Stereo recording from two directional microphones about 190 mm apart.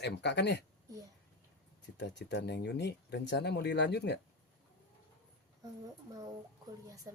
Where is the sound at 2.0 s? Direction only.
65° left (ahead or behind).